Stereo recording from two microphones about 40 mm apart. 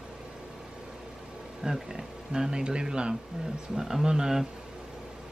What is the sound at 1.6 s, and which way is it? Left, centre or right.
A man's voice, centre.